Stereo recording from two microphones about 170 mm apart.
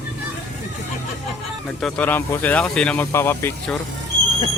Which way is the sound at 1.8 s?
5° left (ahead or behind).